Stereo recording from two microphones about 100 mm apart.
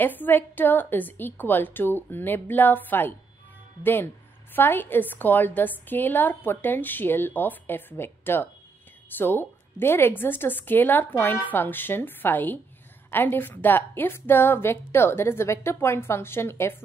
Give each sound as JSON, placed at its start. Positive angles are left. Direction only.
{"t": 0.0, "sound": "a woman's voice", "side_deg": 20}